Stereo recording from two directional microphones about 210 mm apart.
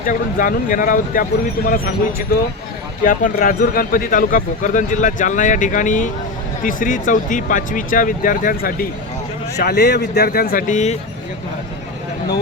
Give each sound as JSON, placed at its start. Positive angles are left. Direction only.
{"t": 0.0, "sound": "speech", "side_deg": 40}